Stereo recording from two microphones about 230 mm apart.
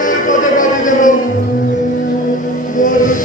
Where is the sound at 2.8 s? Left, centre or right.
Left.